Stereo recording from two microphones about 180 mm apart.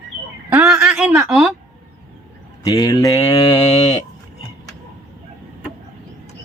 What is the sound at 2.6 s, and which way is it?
Speech, 20° left (ahead or behind).